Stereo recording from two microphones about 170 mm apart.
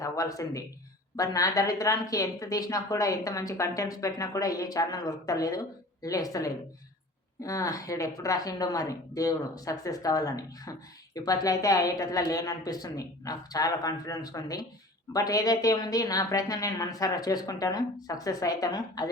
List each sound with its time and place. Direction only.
0.0 s speech: 20° left (ahead or behind)